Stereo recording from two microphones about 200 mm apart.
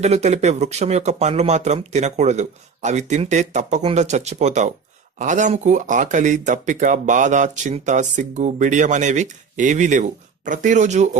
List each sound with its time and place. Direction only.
0.0 s speech: 35° right (ahead or behind)